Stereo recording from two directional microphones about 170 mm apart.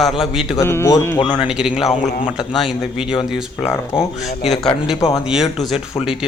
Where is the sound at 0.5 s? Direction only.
15° left (ahead or behind).